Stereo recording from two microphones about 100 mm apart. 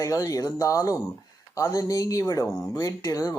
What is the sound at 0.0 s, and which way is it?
Speech, 35° left (ahead or behind).